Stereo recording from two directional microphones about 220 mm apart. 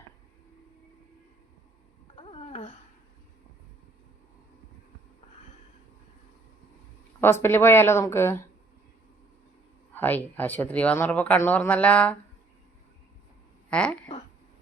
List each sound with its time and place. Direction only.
2.1 s a sound: 25° left (ahead or behind)
7.2 s speech: 10° left (ahead or behind)
9.9 s speech: 10° left (ahead or behind)
13.7 s speech: 5° left (ahead or behind)